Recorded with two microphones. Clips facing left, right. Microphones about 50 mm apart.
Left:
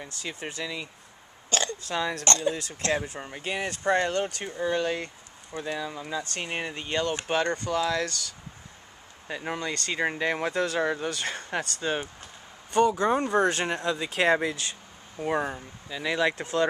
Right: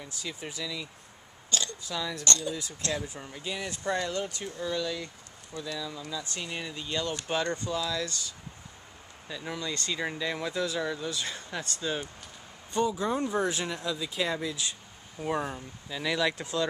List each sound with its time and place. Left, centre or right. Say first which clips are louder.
0.2 s speech: left 3 dB; left
1.5 s burping: left 5 dB; left
2.2 s speech: left 5 dB; left
4.5 s speech: left 5 dB; left
4.7 s speech: left 5 dB; left
7.5 s speech: left 5 dB; left
9.3 s speech: left 4 dB; left
11.1 s speech: left 4 dB; left
11.8 s speech: left 2 dB; left
12.7 s speech: left 6 dB; left
13.8 s speech: left 8 dB; left
15.1 s speech: left 3 dB; centre